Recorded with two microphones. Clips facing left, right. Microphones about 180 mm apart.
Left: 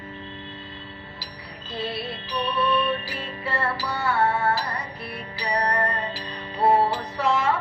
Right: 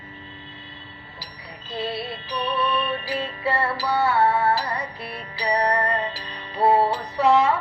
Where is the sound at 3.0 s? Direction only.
65° right (ahead or behind).